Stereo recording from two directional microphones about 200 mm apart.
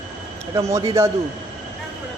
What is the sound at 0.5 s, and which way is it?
Speech, 20° right (ahead or behind).